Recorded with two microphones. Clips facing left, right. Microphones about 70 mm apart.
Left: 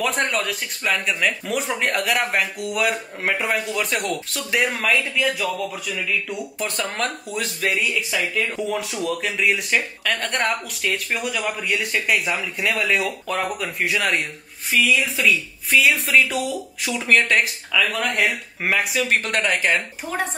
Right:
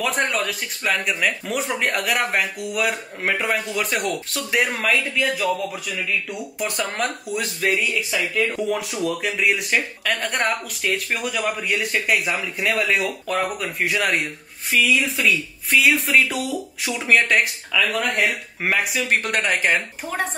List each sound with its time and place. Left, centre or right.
0.0 s speech: centre